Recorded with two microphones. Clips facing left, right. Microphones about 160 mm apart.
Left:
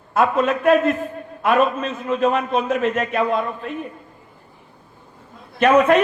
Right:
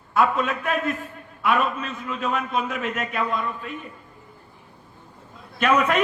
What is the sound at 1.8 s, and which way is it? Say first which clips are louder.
A man's voice: left 9 dB; 30° left (ahead or behind).